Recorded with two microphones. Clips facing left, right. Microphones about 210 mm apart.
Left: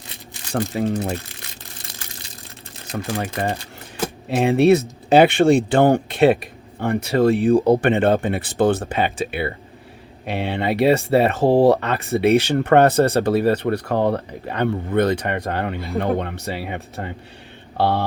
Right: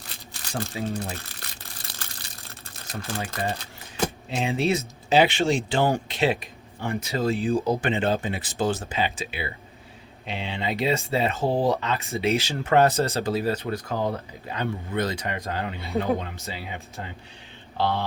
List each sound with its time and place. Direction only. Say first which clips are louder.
0.7 s speech: left 8 dB; 55° left (ahead or behind)
2.9 s speech: left 7 dB; 55° left (ahead or behind)